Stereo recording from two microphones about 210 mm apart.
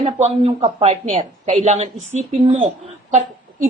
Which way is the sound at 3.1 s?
35° right (ahead or behind).